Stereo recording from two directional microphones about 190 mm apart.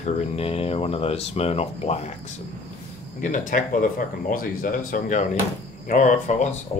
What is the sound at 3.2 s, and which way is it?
Speech, 45° left (ahead or behind).